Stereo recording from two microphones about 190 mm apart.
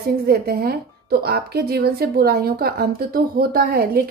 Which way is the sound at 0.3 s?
55° right (ahead or behind).